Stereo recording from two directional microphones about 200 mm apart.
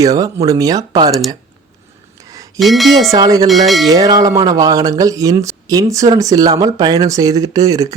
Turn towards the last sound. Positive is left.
turn(degrees=-20)  # may be behind; listen again after turning